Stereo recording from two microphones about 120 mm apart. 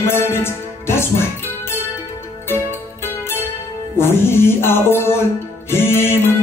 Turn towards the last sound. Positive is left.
turn(degrees=20)  # may be behind; listen again after turning